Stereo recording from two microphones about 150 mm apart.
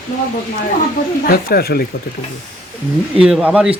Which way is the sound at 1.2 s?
90° left.